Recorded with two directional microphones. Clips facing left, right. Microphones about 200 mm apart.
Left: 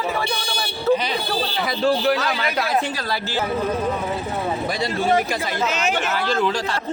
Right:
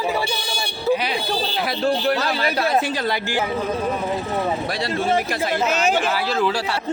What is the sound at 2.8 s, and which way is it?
Speech, 20° right (ahead or behind).